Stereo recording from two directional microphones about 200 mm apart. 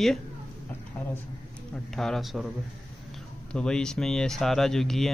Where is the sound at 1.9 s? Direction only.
Centre (ahead or behind).